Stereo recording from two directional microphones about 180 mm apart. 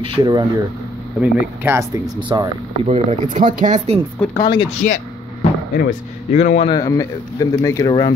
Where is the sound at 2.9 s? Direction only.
40° right (ahead or behind).